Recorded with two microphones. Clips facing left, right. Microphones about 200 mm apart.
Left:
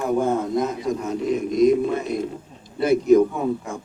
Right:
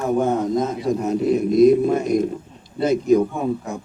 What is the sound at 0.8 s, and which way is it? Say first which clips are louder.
Speech: right 4 dB; 35° right (ahead or behind).